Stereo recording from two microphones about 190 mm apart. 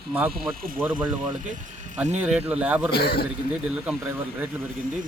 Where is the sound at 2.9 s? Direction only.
55° left (ahead or behind).